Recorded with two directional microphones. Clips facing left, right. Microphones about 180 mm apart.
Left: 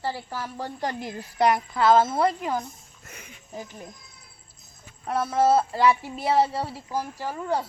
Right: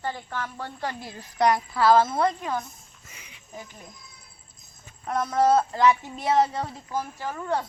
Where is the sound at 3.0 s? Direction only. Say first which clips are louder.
Left 8 dB; 55° left (ahead or behind).